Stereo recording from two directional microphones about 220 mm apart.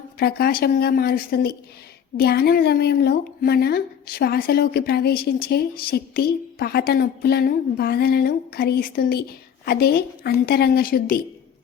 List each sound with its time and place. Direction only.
0.2 s a woman's voice: 45° left (ahead or behind)